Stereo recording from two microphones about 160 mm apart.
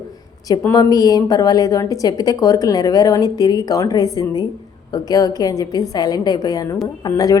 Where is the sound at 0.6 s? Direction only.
20° left (ahead or behind).